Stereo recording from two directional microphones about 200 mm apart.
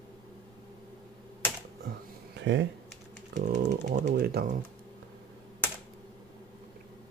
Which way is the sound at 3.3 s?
35° right (ahead or behind).